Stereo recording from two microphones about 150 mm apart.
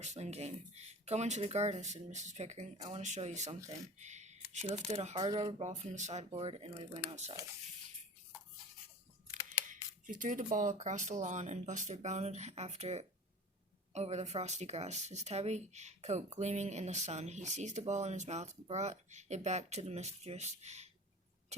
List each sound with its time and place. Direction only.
0.0 s speech: 50° right (ahead or behind)
6.3 s speech: 40° right (ahead or behind)
9.6 s speech: 60° right (ahead or behind)